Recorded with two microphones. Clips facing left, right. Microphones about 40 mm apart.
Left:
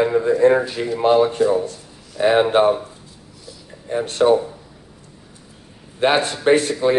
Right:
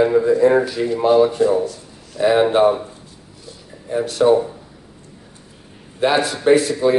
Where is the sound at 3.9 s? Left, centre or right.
Left.